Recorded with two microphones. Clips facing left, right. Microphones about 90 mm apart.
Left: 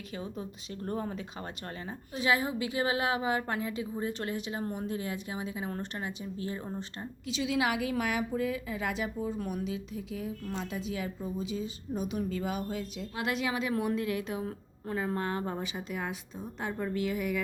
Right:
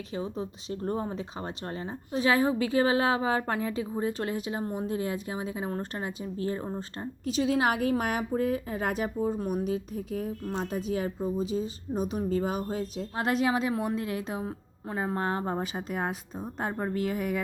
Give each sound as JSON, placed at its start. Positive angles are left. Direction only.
{"t": 0.1, "sound": "a woman's voice", "side_deg": -30}